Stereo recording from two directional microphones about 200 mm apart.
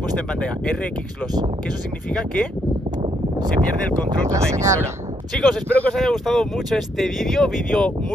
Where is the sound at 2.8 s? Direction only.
20° right (ahead or behind).